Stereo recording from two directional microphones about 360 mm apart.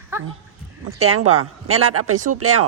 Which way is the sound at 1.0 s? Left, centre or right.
Right.